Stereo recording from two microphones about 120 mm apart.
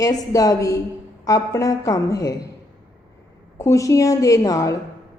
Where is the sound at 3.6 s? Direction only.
25° left (ahead or behind).